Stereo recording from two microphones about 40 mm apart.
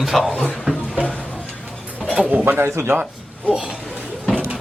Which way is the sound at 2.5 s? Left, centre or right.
Right.